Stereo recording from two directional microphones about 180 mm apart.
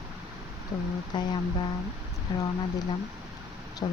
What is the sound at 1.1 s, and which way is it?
Speech, 25° left (ahead or behind).